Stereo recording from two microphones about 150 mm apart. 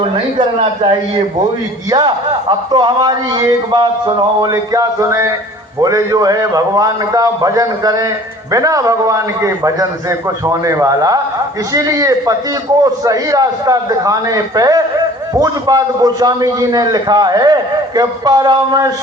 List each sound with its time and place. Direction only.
0.3 s a man's voice: 30° right (ahead or behind)